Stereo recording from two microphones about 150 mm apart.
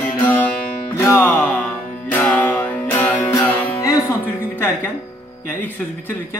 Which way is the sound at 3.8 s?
20° left (ahead or behind).